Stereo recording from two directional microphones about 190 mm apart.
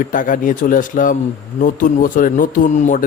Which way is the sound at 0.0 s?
45° left (ahead or behind).